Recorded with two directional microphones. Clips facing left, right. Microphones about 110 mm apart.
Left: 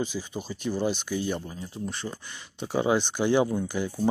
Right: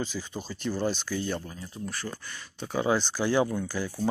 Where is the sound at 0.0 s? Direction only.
10° left (ahead or behind).